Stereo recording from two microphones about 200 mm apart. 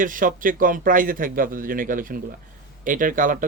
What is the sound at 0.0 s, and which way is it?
Speech, 40° right (ahead or behind).